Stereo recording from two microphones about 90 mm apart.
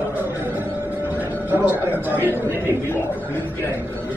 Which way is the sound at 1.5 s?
20° right (ahead or behind).